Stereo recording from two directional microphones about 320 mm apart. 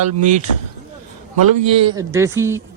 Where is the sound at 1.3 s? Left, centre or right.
Right.